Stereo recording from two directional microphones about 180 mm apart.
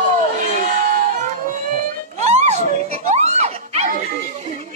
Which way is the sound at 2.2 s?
40° right (ahead or behind).